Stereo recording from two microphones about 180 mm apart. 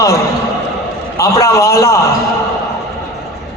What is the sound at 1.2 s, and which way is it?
Speech, 20° left (ahead or behind).